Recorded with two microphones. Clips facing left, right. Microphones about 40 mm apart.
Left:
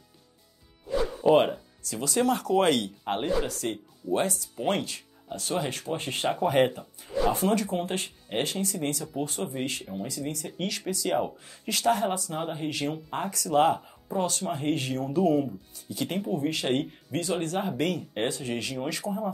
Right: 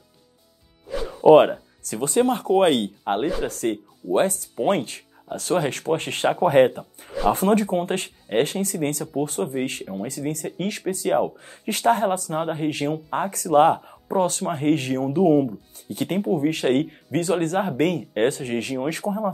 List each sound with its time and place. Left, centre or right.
1.2 s speech: right
3.4 s speech: right